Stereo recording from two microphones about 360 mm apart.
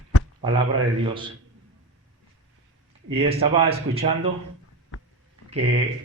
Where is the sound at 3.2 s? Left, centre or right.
Centre.